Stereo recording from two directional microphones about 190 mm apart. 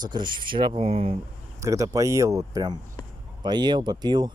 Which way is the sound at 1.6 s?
15° right (ahead or behind).